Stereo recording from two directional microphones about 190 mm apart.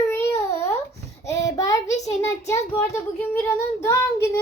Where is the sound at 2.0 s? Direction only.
15° left (ahead or behind).